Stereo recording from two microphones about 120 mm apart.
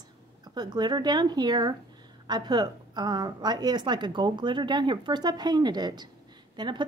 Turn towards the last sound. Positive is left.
turn(degrees=-40)  # may be behind; listen again after turning